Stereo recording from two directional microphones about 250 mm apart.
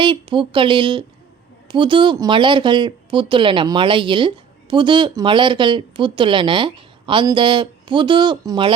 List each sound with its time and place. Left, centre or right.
0.0 s speech: centre